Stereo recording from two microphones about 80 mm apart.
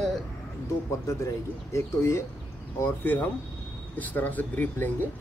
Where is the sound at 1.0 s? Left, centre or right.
Left.